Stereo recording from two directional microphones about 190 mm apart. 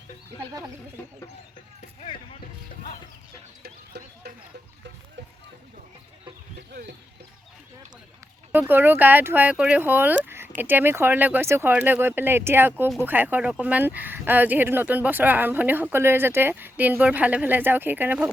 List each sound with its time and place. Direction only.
3.6 s chicken: 55° right (ahead or behind)
6.6 s chicken: 60° right (ahead or behind)
8.5 s speech: 10° right (ahead or behind)